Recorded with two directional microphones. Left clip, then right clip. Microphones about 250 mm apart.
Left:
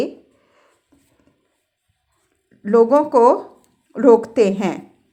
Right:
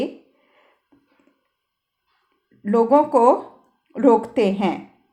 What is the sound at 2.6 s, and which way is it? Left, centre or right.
A woman's voice, centre.